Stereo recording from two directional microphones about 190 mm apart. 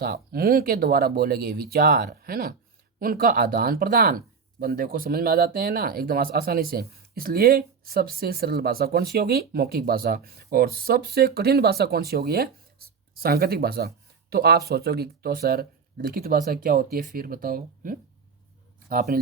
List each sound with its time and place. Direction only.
0.0 s speech: 55° right (ahead or behind)